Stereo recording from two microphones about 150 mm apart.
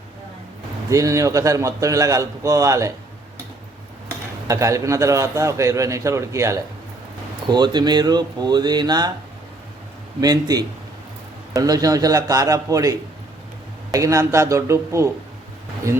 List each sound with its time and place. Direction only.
0.9 s a man's voice: 20° right (ahead or behind)
4.4 s a man's voice: 20° right (ahead or behind)
10.2 s a man's voice: 25° right (ahead or behind)